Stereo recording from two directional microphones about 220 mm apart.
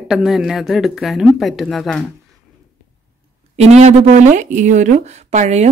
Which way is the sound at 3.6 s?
30° right (ahead or behind).